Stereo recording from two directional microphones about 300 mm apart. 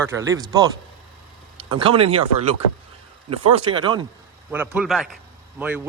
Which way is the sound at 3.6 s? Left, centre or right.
Centre.